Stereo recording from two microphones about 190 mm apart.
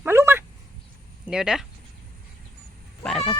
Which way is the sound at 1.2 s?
5° right (ahead or behind).